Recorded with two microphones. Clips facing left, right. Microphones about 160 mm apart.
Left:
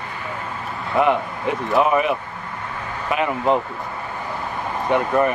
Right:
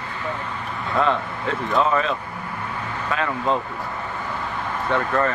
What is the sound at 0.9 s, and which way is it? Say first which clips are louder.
Speech: left 3 dB; 15° left (ahead or behind).